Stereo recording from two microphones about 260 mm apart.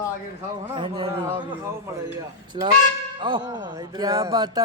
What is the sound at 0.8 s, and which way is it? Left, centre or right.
Speech, centre.